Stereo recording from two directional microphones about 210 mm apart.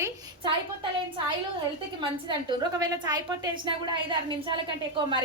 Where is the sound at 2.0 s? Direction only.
20° right (ahead or behind).